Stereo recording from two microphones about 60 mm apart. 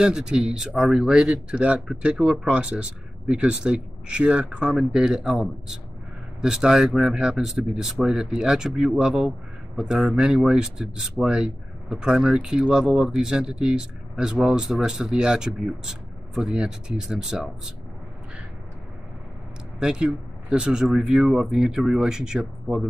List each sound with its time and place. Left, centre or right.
0.0 s speech: centre
19.8 s speech: centre